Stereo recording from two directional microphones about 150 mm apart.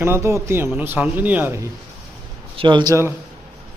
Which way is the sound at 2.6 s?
30° right (ahead or behind).